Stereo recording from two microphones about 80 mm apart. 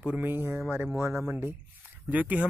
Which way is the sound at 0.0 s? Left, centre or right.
Centre.